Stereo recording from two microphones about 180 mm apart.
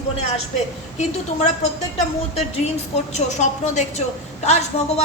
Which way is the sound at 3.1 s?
40° left (ahead or behind).